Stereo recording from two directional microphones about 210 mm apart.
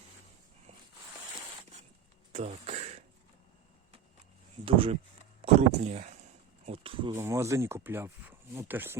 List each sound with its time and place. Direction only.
2.3 s throat clearing: 30° right (ahead or behind)
4.6 s speech: 25° right (ahead or behind)
7.1 s speech: 10° right (ahead or behind)